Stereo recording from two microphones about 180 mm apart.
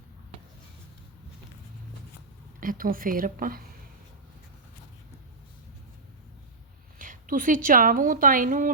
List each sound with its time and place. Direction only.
2.6 s a woman's voice: 50° right (ahead or behind)
7.0 s speech: 50° right (ahead or behind)